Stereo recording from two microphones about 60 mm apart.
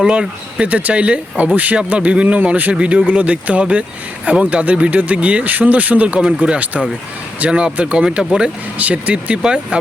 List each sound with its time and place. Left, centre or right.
0.0 s speech: centre
2.7 s speech: centre